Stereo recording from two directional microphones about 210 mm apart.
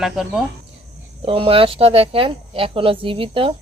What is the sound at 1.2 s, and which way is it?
Speech, 25° right (ahead or behind).